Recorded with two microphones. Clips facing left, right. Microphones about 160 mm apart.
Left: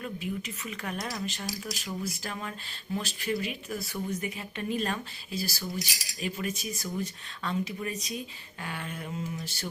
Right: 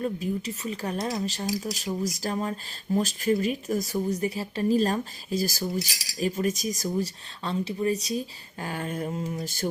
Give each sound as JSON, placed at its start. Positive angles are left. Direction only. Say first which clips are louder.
{"t": 0.0, "sound": "speech", "louder": "right 6 dB", "side_deg": -35}